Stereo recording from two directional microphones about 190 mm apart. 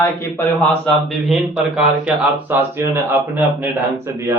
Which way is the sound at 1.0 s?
Centre (ahead or behind).